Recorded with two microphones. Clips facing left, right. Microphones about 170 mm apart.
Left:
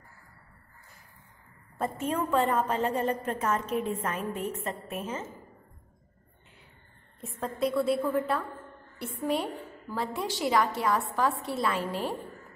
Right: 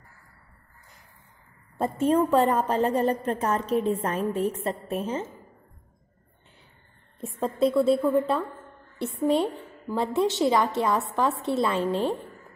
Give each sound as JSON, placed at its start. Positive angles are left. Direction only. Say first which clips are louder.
{"t": 1.8, "sound": "a woman's voice", "louder": "right 8 dB", "side_deg": -30}
{"t": 7.2, "sound": "a woman's voice", "louder": "right 6 dB", "side_deg": -30}